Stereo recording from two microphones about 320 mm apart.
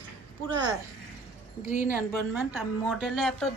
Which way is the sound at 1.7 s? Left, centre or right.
Left.